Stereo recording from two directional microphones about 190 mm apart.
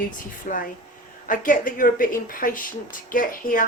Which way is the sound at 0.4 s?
45° left (ahead or behind).